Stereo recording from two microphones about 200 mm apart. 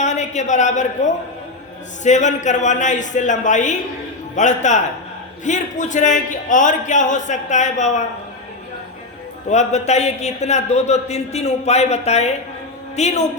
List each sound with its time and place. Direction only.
0.0 s a man's voice: 35° left (ahead or behind)
9.5 s a man's voice: 35° left (ahead or behind)